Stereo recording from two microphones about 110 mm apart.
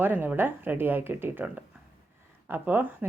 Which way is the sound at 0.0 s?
15° right (ahead or behind).